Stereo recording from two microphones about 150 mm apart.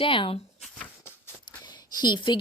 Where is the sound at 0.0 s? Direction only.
35° left (ahead or behind).